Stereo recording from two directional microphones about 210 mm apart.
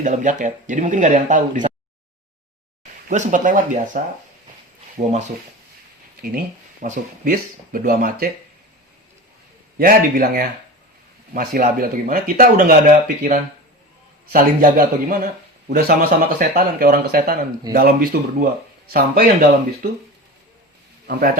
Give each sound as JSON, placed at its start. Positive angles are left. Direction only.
{"t": 0.0, "sound": "speech", "side_deg": -35}
{"t": 3.1, "sound": "speech", "side_deg": -35}
{"t": 6.8, "sound": "speech", "side_deg": -40}
{"t": 9.7, "sound": "speech", "side_deg": -45}
{"t": 21.1, "sound": "speech", "side_deg": -45}